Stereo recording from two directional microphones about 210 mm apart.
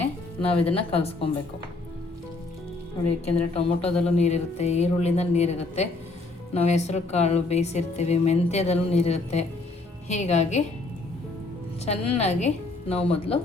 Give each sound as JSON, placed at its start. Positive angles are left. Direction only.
{"t": 0.4, "sound": "speech", "side_deg": 25}
{"t": 3.5, "sound": "a woman's voice", "side_deg": 30}
{"t": 11.9, "sound": "a woman's voice", "side_deg": 30}